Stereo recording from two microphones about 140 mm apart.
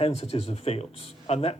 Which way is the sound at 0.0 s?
45° left (ahead or behind).